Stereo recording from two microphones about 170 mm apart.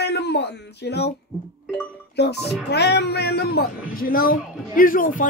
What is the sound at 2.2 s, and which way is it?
Speech, 80° left.